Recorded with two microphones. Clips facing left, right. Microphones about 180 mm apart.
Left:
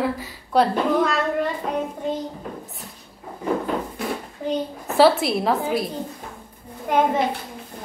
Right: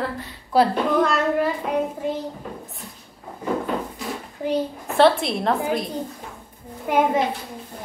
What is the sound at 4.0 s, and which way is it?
Drawer open or close, 60° left (ahead or behind).